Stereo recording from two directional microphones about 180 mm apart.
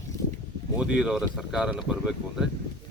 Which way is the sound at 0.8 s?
5° right (ahead or behind).